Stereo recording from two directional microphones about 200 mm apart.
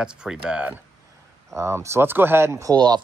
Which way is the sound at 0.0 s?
5° right (ahead or behind).